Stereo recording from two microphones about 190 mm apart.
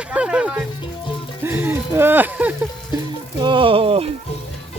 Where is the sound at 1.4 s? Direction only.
10° right (ahead or behind).